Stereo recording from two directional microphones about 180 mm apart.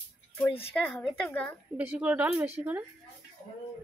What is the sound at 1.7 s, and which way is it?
Speech, 10° right (ahead or behind).